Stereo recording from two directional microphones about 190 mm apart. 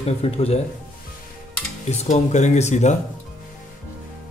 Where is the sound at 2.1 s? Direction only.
40° left (ahead or behind).